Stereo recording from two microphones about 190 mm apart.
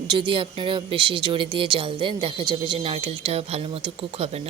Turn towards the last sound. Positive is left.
turn(degrees=-35)  # may be behind; listen again after turning